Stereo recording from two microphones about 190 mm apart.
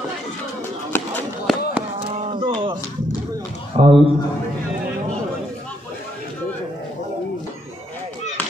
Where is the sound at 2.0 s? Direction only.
30° right (ahead or behind).